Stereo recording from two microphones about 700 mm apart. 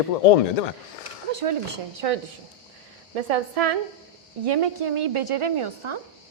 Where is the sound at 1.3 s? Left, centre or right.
Right.